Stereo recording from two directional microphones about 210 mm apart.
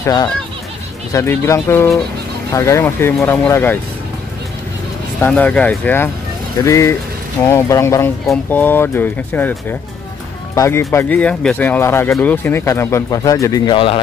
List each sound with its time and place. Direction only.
0.0 s speech: 20° left (ahead or behind)
5.2 s speech: 5° left (ahead or behind); by 13.9 s 25° left (ahead or behind)